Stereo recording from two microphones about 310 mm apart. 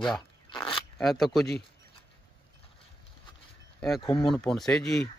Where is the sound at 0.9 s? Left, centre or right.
Centre.